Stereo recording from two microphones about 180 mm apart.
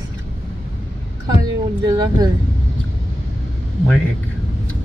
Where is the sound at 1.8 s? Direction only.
20° right (ahead or behind).